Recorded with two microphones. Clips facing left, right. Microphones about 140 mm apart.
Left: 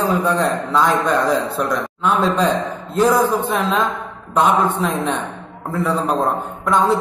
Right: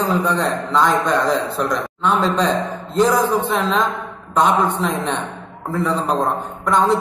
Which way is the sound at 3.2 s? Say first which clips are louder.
Even; 10° left (ahead or behind).